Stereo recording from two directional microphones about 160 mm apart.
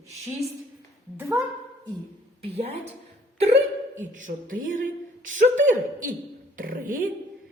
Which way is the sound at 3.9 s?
50° right (ahead or behind).